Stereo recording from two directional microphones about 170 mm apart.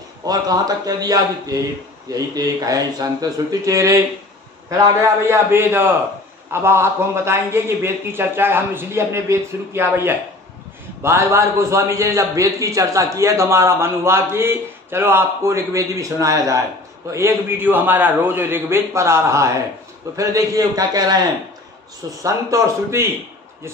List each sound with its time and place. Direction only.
0.3 s a man's voice: 20° right (ahead or behind)
22.2 s a man's voice: 15° right (ahead or behind)